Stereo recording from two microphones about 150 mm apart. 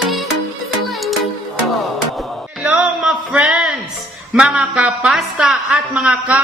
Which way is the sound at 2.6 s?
10° right (ahead or behind).